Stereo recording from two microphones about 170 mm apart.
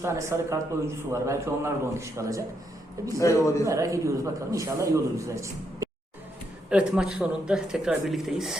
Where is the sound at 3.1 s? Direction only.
20° left (ahead or behind).